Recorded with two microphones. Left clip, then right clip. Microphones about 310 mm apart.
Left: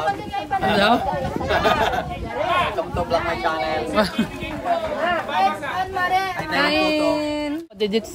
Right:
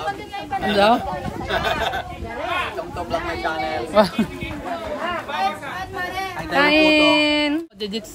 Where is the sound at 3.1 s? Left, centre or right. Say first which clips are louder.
Left 2 dB; centre.